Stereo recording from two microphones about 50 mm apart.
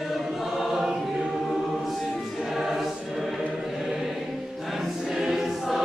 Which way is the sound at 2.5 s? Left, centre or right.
Centre.